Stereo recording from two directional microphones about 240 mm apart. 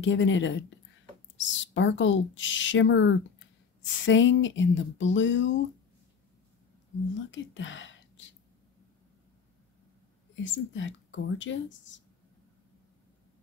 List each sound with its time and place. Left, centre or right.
0.0 s a woman's voice: left
7.2 s a woman's voice: left
10.4 s a woman's voice: left